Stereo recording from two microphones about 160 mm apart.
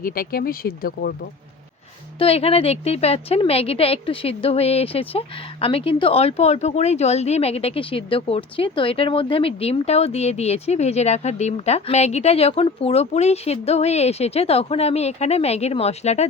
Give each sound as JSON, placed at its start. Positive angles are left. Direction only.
{"t": 0.0, "sound": "speech", "side_deg": 65}
{"t": 2.1, "sound": "a woman's voice", "side_deg": 40}